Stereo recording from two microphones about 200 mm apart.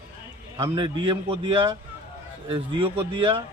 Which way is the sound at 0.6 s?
25° right (ahead or behind).